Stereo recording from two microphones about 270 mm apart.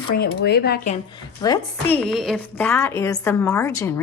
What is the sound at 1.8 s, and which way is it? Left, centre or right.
A woman's voice, centre.